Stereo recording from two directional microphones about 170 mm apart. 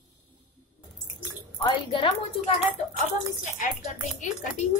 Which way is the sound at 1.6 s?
30° left (ahead or behind).